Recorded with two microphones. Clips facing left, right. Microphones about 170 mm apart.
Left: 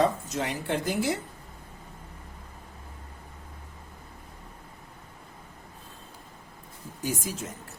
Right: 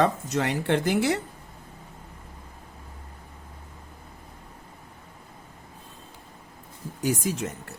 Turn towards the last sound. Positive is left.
turn(degrees=-70)  # may be behind; listen again after turning